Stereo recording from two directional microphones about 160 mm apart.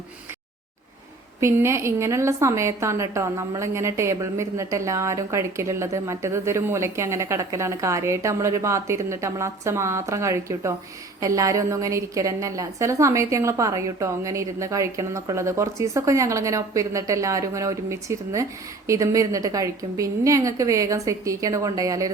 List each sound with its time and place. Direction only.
1.4 s a woman's voice: 15° right (ahead or behind)